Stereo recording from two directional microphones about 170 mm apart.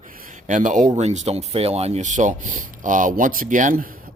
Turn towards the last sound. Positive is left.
turn(degrees=-55)  # may be behind; listen again after turning